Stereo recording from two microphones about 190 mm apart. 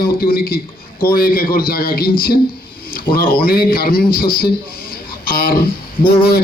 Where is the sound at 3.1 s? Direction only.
50° left (ahead or behind).